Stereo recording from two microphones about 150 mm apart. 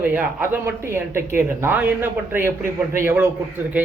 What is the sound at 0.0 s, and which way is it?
Speech, 10° right (ahead or behind).